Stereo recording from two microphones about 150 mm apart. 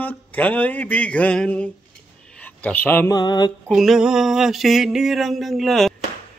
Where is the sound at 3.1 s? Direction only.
30° left (ahead or behind).